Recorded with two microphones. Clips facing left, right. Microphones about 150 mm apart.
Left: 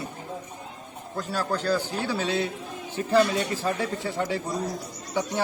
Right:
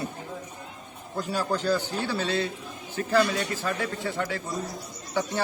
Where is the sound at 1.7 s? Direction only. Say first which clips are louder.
Left 1 dB; 10° left (ahead or behind).